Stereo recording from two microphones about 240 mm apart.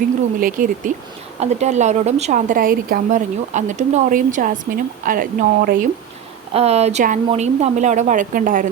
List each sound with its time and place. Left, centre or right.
0.3 s a woman's voice: right